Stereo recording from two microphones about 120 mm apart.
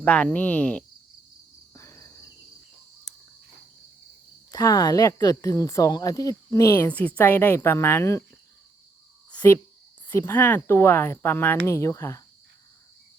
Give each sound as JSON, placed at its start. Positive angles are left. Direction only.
{"t": 0.0, "sound": "a woman's voice", "side_deg": 10}
{"t": 1.7, "sound": "cricket", "side_deg": 25}
{"t": 4.5, "sound": "speech", "side_deg": 30}
{"t": 6.8, "sound": "a woman's voice", "side_deg": 15}
{"t": 9.3, "sound": "cricket", "side_deg": 15}
{"t": 10.1, "sound": "speech", "side_deg": 20}